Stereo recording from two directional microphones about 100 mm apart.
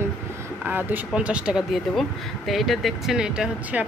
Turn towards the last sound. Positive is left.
turn(degrees=-10)  # may be behind; listen again after turning